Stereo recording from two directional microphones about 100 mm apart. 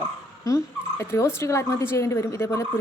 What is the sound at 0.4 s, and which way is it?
Speech, 30° left (ahead or behind).